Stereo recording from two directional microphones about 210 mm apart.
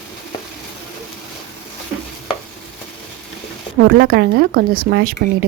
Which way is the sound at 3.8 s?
50° right (ahead or behind).